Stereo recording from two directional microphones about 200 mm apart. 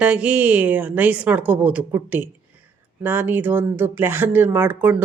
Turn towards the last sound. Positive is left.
turn(degrees=-10)  # may be behind; listen again after turning